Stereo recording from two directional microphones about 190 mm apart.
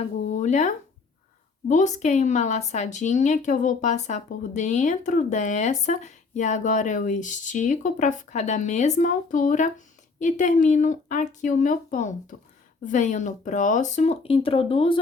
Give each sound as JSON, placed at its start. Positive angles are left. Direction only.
{"t": 0.3, "sound": "speech", "side_deg": 40}